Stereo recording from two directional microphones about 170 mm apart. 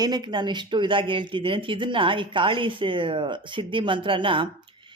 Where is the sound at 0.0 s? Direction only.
25° right (ahead or behind).